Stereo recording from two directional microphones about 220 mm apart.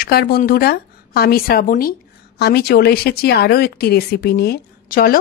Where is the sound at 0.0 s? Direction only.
45° left (ahead or behind).